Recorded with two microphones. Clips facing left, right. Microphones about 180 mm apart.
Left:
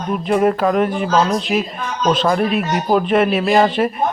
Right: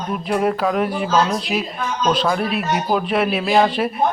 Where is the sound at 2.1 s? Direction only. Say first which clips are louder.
Left 4 dB; centre (ahead or behind).